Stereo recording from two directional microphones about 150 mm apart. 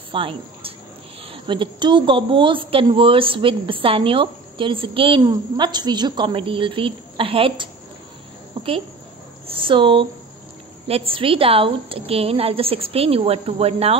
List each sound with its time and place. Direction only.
0.1 s a woman's voice: 35° right (ahead or behind)
8.6 s a sound: 35° right (ahead or behind)
9.5 s a woman's voice: 35° right (ahead or behind)